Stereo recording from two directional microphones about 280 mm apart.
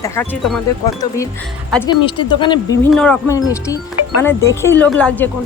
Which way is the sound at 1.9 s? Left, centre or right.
Centre.